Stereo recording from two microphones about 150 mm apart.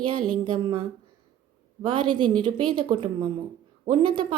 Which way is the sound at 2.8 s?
30° right (ahead or behind).